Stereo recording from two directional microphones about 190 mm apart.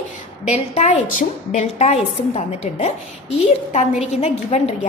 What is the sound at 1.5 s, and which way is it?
A woman's voice, 35° left (ahead or behind).